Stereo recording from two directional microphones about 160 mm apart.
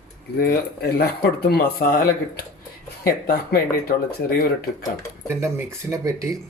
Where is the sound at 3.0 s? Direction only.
65° left (ahead or behind).